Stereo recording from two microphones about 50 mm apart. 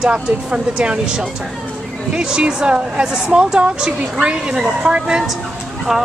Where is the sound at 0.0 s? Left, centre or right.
Centre.